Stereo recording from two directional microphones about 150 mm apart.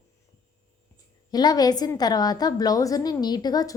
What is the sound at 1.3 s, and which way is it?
A woman's voice, 25° left (ahead or behind).